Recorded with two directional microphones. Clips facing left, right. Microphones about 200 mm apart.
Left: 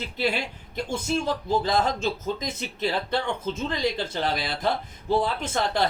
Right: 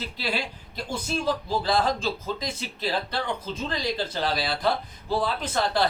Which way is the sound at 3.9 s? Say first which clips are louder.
Even; 20° left (ahead or behind).